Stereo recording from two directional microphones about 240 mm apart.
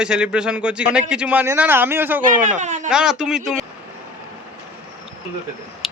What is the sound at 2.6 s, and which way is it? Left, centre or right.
Speech, right.